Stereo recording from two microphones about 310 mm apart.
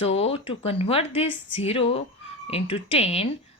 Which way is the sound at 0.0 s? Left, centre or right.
Centre.